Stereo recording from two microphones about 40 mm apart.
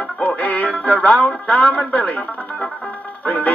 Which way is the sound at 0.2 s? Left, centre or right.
Left.